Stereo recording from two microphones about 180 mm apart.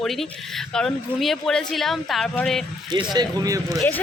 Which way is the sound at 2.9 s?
25° right (ahead or behind).